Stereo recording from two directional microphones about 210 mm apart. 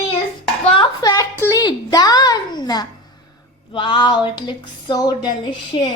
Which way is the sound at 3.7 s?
25° left (ahead or behind).